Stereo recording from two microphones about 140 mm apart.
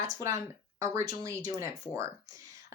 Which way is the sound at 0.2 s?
20° right (ahead or behind).